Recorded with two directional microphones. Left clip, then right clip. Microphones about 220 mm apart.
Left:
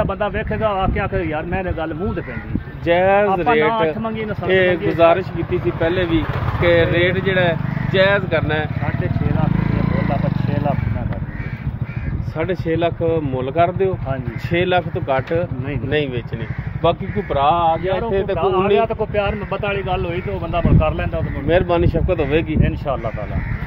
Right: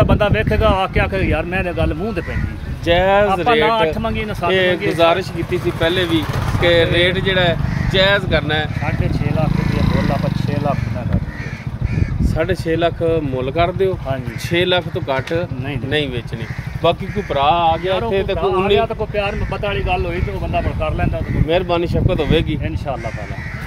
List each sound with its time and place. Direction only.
0.0 s speech: 50° right (ahead or behind)
2.9 s speech: 5° right (ahead or behind)
4.0 s speech: 50° right (ahead or behind)
4.5 s speech: 5° right (ahead or behind)
12.4 s speech: 5° right (ahead or behind)
16.8 s speech: 5° right (ahead or behind)
19.1 s speech: 20° left (ahead or behind)
21.5 s speech: centre (ahead or behind)